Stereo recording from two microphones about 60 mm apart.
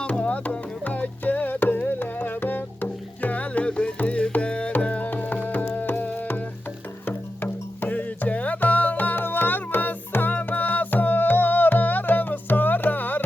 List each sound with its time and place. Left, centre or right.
0.0 s music: left